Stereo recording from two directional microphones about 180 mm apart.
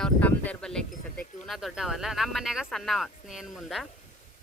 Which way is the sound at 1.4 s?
Centre (ahead or behind).